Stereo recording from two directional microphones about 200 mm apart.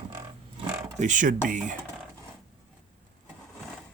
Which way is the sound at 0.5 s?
35° right (ahead or behind).